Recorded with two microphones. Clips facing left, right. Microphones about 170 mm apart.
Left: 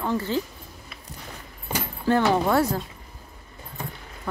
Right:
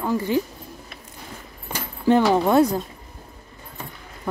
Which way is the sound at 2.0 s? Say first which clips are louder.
Right 4 dB; 15° right (ahead or behind).